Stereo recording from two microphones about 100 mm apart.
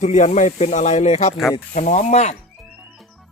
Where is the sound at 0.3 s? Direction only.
90° left.